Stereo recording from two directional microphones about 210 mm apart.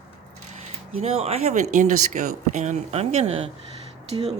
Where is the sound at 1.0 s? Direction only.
30° right (ahead or behind).